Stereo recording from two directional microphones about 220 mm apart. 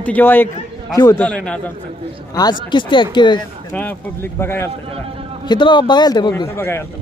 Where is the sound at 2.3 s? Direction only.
20° left (ahead or behind).